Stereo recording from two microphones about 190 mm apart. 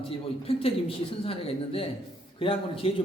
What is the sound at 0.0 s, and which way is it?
A man's voice, 30° left (ahead or behind).